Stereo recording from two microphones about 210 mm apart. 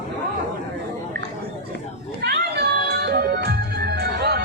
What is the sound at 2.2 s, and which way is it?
Music, 50° right (ahead or behind).